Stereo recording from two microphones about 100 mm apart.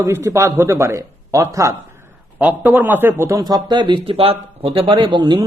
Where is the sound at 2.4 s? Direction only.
15° right (ahead or behind).